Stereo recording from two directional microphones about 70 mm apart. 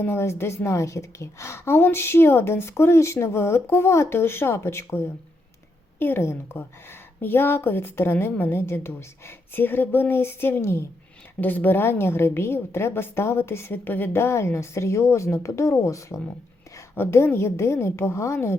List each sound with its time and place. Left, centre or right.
0.0 s a woman's voice: left
11.3 s a woman's voice: left
16.9 s a woman's voice: left